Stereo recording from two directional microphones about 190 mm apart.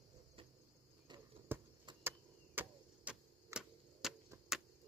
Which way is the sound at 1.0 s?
25° right (ahead or behind).